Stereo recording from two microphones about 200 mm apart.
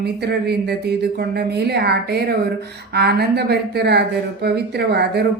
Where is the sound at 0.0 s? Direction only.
55° right (ahead or behind).